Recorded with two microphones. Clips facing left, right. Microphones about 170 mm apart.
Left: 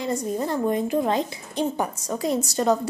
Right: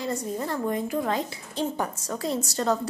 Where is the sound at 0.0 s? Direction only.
20° left (ahead or behind).